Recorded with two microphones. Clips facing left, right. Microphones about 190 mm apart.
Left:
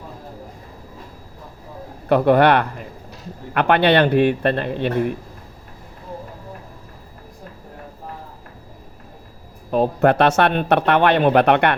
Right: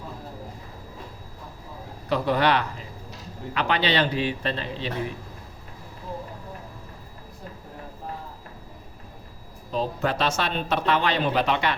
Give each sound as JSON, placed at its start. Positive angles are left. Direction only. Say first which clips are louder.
{"t": 2.0, "sound": "speech", "louder": "left 8 dB", "side_deg": 55}
{"t": 9.7, "sound": "speech", "louder": "left 10 dB", "side_deg": 55}